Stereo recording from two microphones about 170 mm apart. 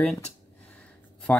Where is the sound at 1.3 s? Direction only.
10° left (ahead or behind).